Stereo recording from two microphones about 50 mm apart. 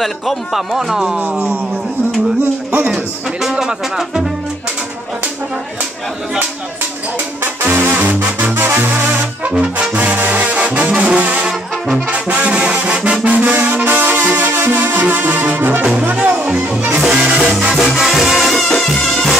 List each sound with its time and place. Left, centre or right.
0.0 s speech: centre
1.1 s speech: right
2.9 s speech: centre
7.6 s music: right
9.5 s brass instrument: right
13.6 s music: right
15.8 s music: right
16.1 s music: right
17.0 s music: centre